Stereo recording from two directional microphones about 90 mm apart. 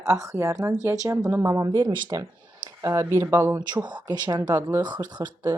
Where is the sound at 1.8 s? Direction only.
55° right (ahead or behind).